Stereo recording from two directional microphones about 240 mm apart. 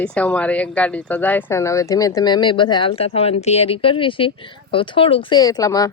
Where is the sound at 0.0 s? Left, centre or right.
Centre.